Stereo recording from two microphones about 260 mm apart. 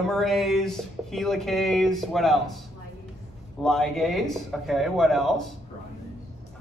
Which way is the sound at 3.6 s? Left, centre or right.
Centre.